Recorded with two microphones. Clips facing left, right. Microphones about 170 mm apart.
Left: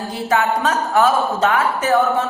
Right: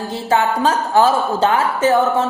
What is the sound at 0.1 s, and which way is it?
A woman's voice, 30° right (ahead or behind).